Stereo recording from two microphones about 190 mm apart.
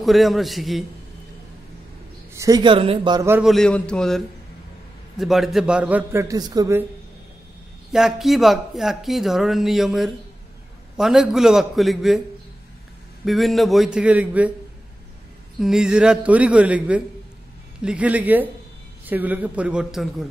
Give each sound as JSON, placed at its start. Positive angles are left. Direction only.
{"t": 0.0, "sound": "speech", "side_deg": 0}
{"t": 2.3, "sound": "a man's voice", "side_deg": -20}
{"t": 3.4, "sound": "speech", "side_deg": 5}
{"t": 5.2, "sound": "a man's voice", "side_deg": 0}
{"t": 7.9, "sound": "speech", "side_deg": 0}
{"t": 13.2, "sound": "speech", "side_deg": 0}
{"t": 15.6, "sound": "a man's voice", "side_deg": -5}